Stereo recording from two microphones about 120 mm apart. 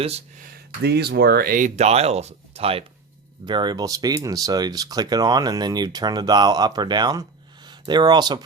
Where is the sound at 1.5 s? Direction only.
80° right; by 2.8 s 55° right (ahead or behind).